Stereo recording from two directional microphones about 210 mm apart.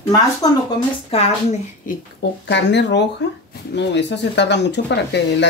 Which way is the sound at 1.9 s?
40° left (ahead or behind).